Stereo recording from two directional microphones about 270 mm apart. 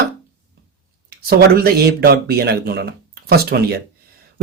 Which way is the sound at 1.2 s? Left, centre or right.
Right.